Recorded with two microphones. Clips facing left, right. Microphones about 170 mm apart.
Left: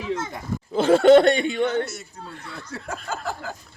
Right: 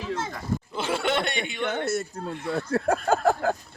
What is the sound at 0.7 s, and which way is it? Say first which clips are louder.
Speech: left 14 dB; 40° left (ahead or behind).